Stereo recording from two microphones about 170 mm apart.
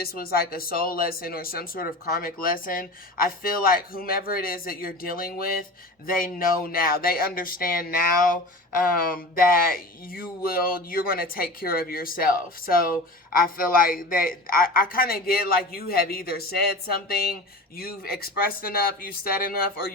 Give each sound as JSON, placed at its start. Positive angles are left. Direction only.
{"t": 0.0, "sound": "speech", "side_deg": 60}